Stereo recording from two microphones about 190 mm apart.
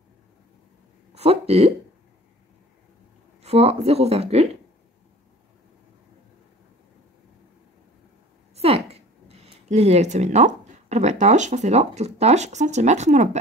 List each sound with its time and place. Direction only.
1.1 s speech: 30° right (ahead or behind)
3.4 s speech: 30° right (ahead or behind)
8.5 s speech: 30° right (ahead or behind)